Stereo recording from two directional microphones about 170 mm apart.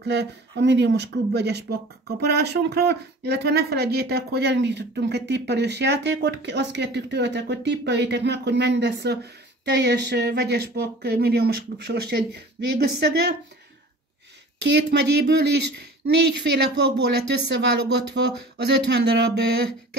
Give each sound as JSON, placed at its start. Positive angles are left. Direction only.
{"t": 0.0, "sound": "speech", "side_deg": -90}
{"t": 14.6, "sound": "speech", "side_deg": -85}